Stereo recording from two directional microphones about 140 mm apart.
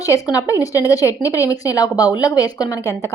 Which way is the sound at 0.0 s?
25° left (ahead or behind).